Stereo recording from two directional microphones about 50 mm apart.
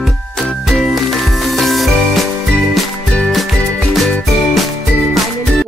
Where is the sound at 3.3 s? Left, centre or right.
Centre.